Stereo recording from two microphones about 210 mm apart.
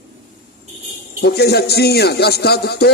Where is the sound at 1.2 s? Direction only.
50° left (ahead or behind).